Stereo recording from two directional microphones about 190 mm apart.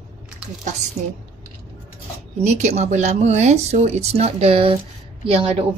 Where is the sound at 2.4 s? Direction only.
35° right (ahead or behind).